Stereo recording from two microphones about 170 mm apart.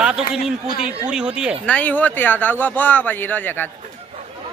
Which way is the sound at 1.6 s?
10° left (ahead or behind).